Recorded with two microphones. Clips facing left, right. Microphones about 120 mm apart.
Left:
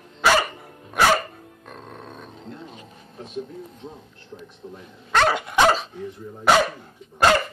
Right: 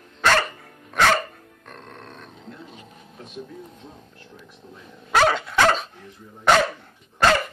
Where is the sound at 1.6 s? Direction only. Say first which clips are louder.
Left 2 dB; 5° left (ahead or behind).